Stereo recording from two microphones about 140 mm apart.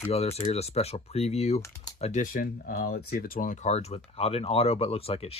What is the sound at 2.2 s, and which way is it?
Speech, 80° left.